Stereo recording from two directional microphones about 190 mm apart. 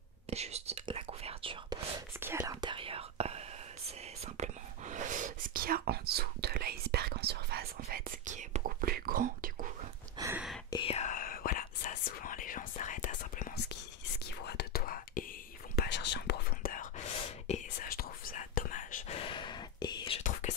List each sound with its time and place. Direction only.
0.3 s whispering: 35° right (ahead or behind)
2.1 s whispering: 10° right (ahead or behind); by 9.7 s 45° right (ahead or behind)
10.1 s a sound: 15° right (ahead or behind)
10.7 s whispering: 30° left (ahead or behind)
14.2 s whispering: 55° left (ahead or behind)
15.7 s whispering: 60° left (ahead or behind)
17.5 s whispering: 35° left (ahead or behind)
17.8 s whispering: 50° left (ahead or behind)
19.1 s whispering: 25° left (ahead or behind)